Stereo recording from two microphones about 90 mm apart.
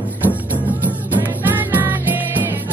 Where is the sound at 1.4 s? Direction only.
20° right (ahead or behind).